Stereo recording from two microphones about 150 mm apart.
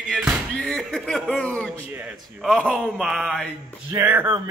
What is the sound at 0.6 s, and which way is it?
A man's voice, 5° left (ahead or behind).